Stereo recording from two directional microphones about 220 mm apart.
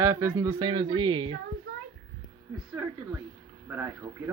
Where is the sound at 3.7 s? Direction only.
10° right (ahead or behind).